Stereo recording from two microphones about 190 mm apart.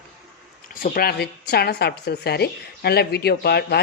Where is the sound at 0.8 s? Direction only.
50° left (ahead or behind).